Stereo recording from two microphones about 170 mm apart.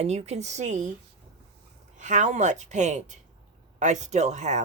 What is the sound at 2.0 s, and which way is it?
Speech, 45° right (ahead or behind).